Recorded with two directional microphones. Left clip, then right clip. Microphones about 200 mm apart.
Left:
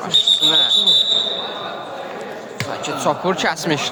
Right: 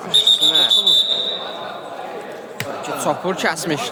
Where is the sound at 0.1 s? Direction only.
15° left (ahead or behind).